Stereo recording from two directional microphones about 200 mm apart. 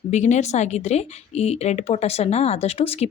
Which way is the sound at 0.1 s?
35° left (ahead or behind).